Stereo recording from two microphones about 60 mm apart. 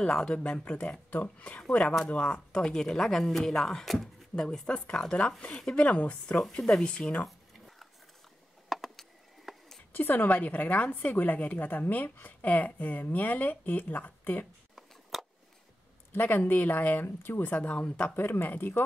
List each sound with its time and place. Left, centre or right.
0.0 s a woman's voice: centre
4.5 s speech: centre
7.2 s a sound: centre
9.9 s a woman's voice: left
14.8 s a sound: centre
16.1 s speech: left
17.6 s a woman's voice: centre
18.1 s speech: left